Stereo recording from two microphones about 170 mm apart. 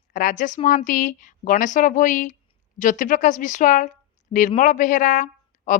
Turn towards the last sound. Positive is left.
turn(degrees=45)  # may be behind; listen again after turning